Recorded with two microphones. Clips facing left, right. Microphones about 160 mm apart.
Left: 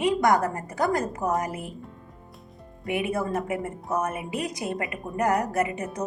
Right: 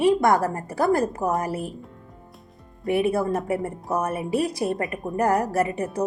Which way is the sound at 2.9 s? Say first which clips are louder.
Right 5 dB; 30° right (ahead or behind).